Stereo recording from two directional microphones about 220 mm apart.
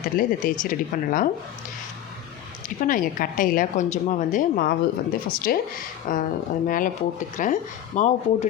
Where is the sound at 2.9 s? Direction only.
40° left (ahead or behind).